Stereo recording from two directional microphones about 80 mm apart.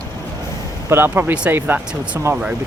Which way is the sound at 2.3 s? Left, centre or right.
Right.